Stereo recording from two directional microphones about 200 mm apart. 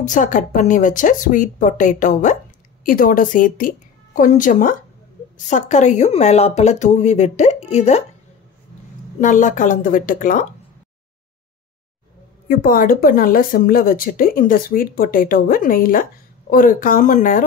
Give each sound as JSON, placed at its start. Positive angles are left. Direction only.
{"t": 0.0, "sound": "a woman's voice", "side_deg": 40}
{"t": 9.2, "sound": "a woman's voice", "side_deg": 40}
{"t": 12.4, "sound": "speech", "side_deg": 45}